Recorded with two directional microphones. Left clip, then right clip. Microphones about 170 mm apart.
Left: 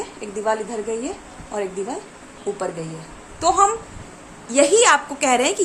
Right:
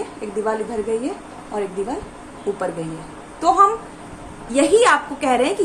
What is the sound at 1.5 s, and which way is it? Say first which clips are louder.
Speech: right 1 dB; 45° left (ahead or behind).